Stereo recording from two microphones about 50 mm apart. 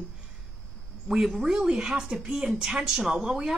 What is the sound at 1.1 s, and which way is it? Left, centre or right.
A woman's voice, centre.